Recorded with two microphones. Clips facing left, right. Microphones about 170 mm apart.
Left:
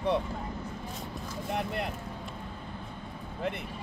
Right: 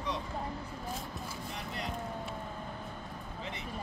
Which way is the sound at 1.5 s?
60° left (ahead or behind).